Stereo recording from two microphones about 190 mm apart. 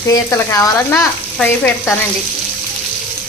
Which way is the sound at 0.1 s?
15° left (ahead or behind).